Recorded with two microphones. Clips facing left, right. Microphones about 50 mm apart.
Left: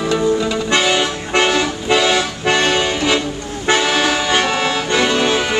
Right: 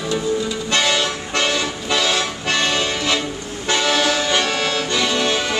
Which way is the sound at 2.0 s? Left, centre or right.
Centre.